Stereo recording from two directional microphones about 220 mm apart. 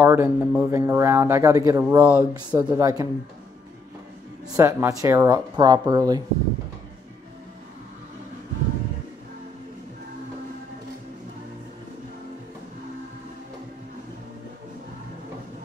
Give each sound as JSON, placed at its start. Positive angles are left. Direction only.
{"t": 0.0, "sound": "speech", "side_deg": -10}
{"t": 4.6, "sound": "speech", "side_deg": -10}